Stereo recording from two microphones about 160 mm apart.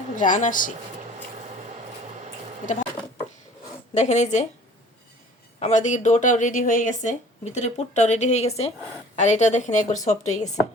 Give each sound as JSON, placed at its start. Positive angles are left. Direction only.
{"t": 0.2, "sound": "speech", "side_deg": 55}
{"t": 3.9, "sound": "speech", "side_deg": 45}
{"t": 5.5, "sound": "speech", "side_deg": 45}